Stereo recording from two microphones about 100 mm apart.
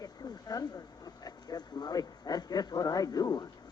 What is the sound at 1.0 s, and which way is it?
A man's voice, 40° left (ahead or behind).